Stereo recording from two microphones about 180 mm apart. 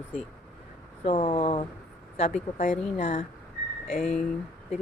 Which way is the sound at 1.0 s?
30° left (ahead or behind).